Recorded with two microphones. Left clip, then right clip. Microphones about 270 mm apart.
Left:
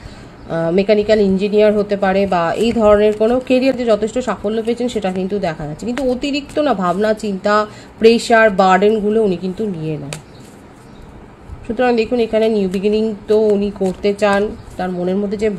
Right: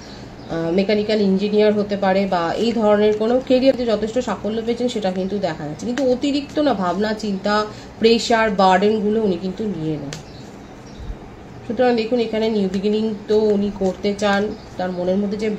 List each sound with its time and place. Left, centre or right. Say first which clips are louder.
0.5 s speech: left 5 dB; left
11.7 s speech: left 2 dB; left